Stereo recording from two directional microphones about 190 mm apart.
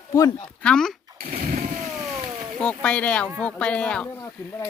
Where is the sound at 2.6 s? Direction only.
5° left (ahead or behind).